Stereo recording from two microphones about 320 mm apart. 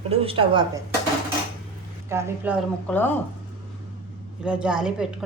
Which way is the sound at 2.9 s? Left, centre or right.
Centre.